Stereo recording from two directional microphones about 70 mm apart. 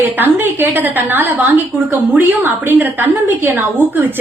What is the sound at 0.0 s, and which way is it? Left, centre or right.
A woman's voice, right.